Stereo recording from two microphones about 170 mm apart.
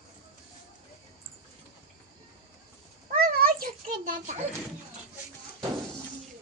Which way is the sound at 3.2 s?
60° right (ahead or behind).